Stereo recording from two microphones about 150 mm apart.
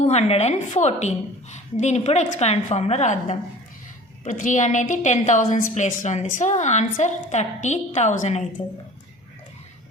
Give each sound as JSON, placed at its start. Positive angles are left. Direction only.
{"t": 0.0, "sound": "a woman's voice", "side_deg": 45}